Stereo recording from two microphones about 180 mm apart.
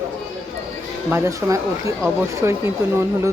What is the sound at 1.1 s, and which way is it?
A woman's voice, 15° right (ahead or behind).